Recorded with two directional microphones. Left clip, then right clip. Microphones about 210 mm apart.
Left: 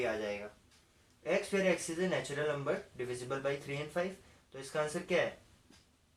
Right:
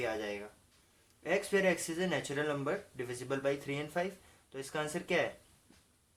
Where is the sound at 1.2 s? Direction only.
40° right (ahead or behind).